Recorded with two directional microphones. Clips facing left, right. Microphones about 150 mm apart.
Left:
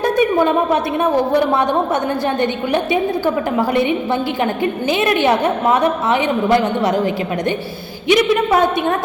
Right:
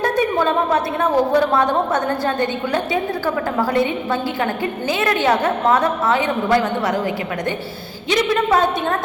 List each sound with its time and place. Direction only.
0.0 s a sound: 15° left (ahead or behind)
2.4 s a woman's voice: 20° left (ahead or behind)
4.6 s a woman's voice: 20° left (ahead or behind)